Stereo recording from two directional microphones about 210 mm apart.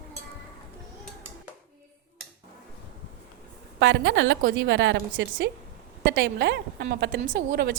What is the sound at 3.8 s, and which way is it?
A woman's voice, 55° right (ahead or behind).